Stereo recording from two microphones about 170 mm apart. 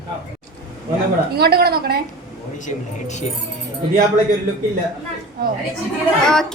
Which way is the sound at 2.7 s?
45° left (ahead or behind).